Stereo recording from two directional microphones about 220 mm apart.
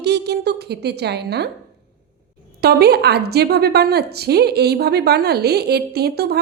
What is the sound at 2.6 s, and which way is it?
A woman's voice, 45° right (ahead or behind).